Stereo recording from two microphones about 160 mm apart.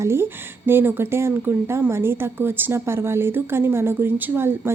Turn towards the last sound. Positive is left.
turn(degrees=-15)  # may be behind; listen again after turning